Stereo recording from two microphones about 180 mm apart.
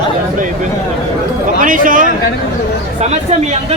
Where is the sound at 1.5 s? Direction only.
50° right (ahead or behind).